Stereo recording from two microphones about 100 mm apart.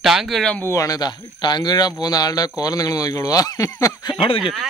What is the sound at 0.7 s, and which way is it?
Speech, 35° left (ahead or behind).